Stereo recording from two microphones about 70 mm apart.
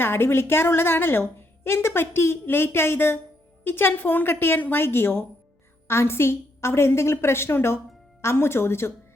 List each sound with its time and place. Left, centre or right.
0.0 s a woman's voice: left